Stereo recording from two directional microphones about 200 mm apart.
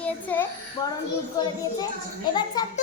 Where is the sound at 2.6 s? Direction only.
20° left (ahead or behind).